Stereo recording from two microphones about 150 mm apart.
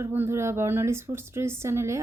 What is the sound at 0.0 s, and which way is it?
Speech, 15° right (ahead or behind).